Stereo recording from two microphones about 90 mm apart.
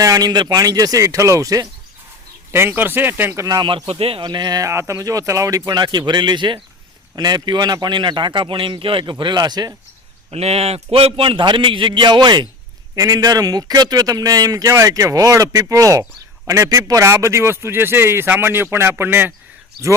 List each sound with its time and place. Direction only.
0.0 s speech: 45° right (ahead or behind)
2.5 s a man's voice: 25° right (ahead or behind)
3.6 s a man's voice: 55° right (ahead or behind)
3.8 s speech: 90° right
4.3 s speech: 50° right (ahead or behind)
4.7 s speech: 35° right (ahead or behind)
5.7 s a man's voice: 55° right (ahead or behind)
10.3 s a man's voice: 90° right; by 12.5 s 55° right (ahead or behind)
13.0 s a man's voice: 40° right (ahead or behind); by 19.3 s 20° right (ahead or behind)